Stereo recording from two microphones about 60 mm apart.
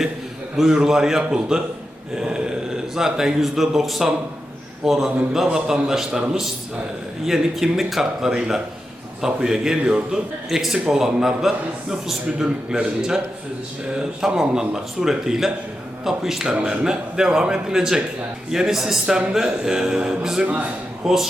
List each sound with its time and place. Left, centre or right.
0.5 s a man's voice: centre
20.4 s a man's voice: right
21.0 s speech: centre